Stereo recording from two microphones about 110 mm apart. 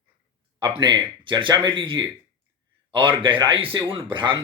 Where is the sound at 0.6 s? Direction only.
45° right (ahead or behind).